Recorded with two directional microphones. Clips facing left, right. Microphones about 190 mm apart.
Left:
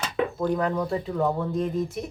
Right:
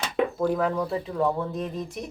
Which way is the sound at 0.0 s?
5° right (ahead or behind).